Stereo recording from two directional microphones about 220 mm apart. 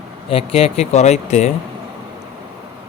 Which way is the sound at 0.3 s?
25° left (ahead or behind).